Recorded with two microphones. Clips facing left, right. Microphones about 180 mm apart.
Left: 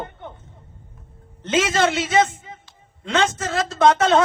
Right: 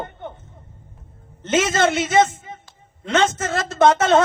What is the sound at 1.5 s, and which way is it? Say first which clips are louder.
A man's voice: right 1 dB; 20° right (ahead or behind).